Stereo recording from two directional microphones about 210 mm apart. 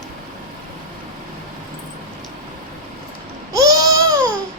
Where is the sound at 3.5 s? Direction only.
15° right (ahead or behind).